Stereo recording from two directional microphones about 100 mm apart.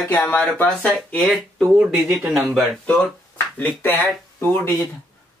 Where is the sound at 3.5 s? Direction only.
20° left (ahead or behind).